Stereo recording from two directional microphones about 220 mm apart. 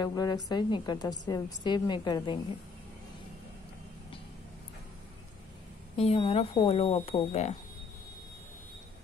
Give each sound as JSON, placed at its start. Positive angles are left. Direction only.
{"t": 0.0, "sound": "a woman's voice", "side_deg": 20}
{"t": 5.9, "sound": "speech", "side_deg": 25}